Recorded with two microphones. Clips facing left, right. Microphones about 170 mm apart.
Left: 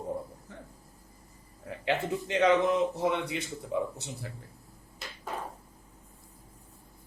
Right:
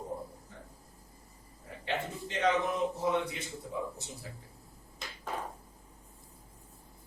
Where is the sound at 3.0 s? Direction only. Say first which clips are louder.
Left 2 dB; 75° left (ahead or behind).